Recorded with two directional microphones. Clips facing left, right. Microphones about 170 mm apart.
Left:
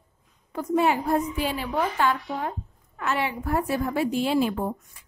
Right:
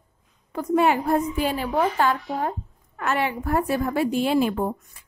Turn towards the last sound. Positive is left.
turn(degrees=-55)  # may be behind; listen again after turning